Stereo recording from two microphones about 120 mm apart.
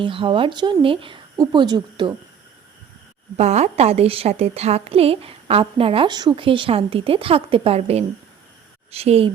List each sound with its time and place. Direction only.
0.0 s speech: 45° right (ahead or behind)
1.4 s hoot: 35° right (ahead or behind)
3.3 s a woman's voice: 65° right (ahead or behind); by 6.1 s 50° right (ahead or behind)
6.1 s a woman's voice: 35° right (ahead or behind); by 9.3 s 55° right (ahead or behind)